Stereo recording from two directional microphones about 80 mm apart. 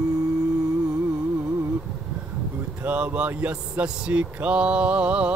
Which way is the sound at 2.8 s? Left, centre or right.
Centre.